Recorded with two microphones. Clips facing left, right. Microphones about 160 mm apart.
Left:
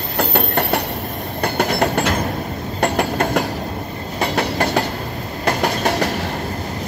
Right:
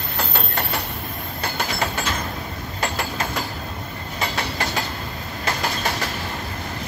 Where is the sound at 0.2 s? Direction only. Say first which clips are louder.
Left 8 dB; 55° left (ahead or behind).